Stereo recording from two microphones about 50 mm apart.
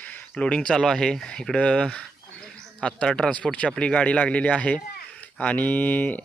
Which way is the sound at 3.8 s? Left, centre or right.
Left.